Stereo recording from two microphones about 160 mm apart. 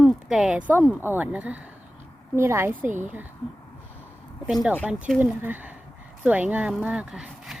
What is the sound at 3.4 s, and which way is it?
Speech, 30° left (ahead or behind).